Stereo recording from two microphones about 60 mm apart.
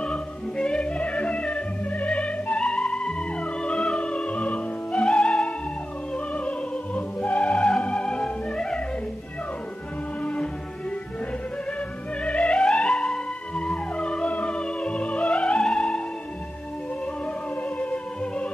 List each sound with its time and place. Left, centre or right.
0.0 s music: centre
10.2 s music: centre
12.2 s music: centre
17.6 s music: left